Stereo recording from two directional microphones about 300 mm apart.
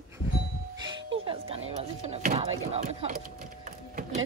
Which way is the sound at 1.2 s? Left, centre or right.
Centre.